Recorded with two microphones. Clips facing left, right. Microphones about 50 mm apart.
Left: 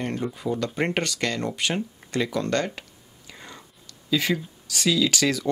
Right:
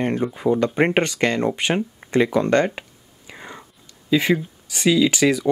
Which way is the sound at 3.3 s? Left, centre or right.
Right.